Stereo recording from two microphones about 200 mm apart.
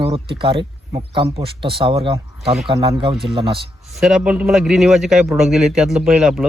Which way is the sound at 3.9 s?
Centre (ahead or behind).